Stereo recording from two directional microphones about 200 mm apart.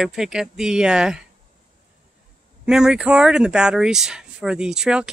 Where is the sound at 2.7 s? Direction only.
5° right (ahead or behind).